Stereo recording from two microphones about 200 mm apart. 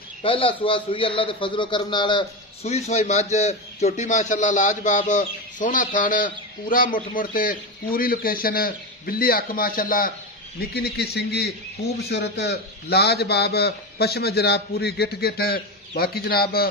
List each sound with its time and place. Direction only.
0.2 s a man's voice: 25° left (ahead or behind); by 16.6 s 50° left (ahead or behind)